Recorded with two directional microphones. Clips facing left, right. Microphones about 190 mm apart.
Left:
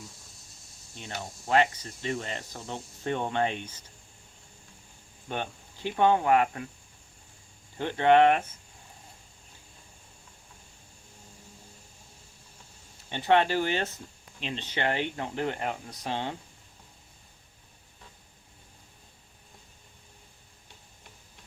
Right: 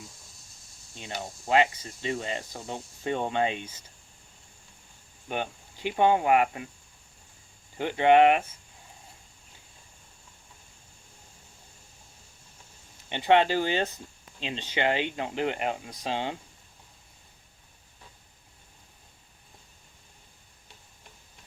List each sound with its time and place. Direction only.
1.0 s speech: 15° right (ahead or behind)
5.3 s speech: 15° right (ahead or behind)
7.8 s speech: 15° right (ahead or behind)
13.1 s speech: 20° right (ahead or behind)